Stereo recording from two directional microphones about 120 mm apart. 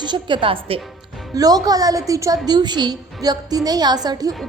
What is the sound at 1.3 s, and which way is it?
A woman's voice, 30° right (ahead or behind).